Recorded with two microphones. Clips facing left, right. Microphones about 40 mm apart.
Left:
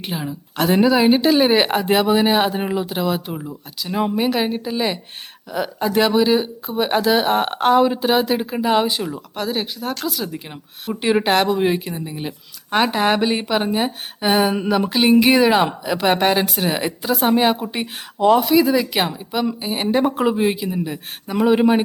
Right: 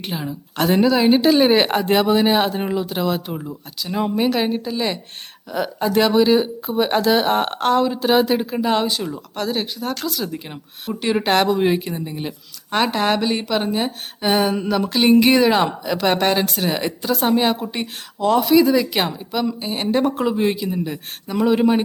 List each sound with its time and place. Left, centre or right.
0.0 s a woman's voice: centre
8.1 s speech: centre
11.0 s a woman's voice: centre
11.3 s a woman's voice: centre